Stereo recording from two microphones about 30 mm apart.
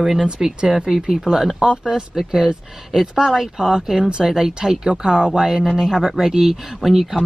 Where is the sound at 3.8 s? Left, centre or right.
Centre; by 5.5 s right.